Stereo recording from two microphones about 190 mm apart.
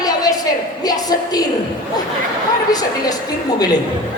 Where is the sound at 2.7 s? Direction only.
20° left (ahead or behind).